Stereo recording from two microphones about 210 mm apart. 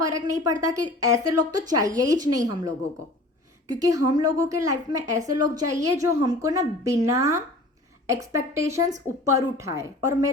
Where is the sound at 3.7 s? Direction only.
15° right (ahead or behind).